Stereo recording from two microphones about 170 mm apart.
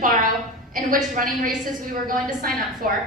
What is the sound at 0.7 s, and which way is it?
A woman's voice, 50° right (ahead or behind).